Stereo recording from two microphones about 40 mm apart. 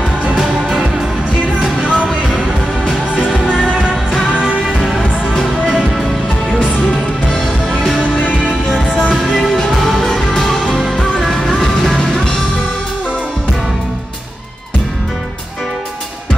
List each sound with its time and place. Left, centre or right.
0.5 s music: centre
3.2 s music: right
6.9 s music: centre
8.8 s music: centre
9.1 s music: centre